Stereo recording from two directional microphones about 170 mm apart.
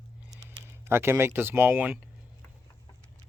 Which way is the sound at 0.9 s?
15° right (ahead or behind).